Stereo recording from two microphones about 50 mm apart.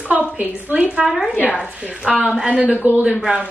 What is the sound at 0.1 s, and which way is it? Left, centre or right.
Speech, right.